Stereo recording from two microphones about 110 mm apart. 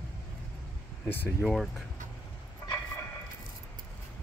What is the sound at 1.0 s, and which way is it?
Speech, 20° left (ahead or behind).